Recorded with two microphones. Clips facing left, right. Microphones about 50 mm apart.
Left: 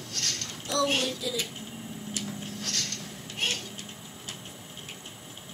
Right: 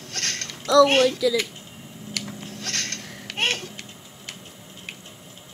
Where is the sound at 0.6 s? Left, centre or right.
Right.